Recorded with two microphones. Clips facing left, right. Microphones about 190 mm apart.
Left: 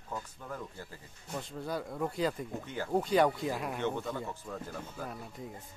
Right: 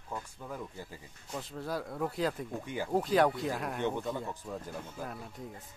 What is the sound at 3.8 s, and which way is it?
Speech, 15° right (ahead or behind).